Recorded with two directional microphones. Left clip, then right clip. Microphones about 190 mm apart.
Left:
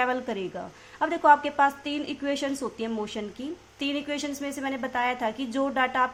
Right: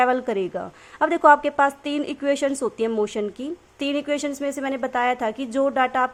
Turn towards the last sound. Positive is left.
turn(degrees=-35)  # may be behind; listen again after turning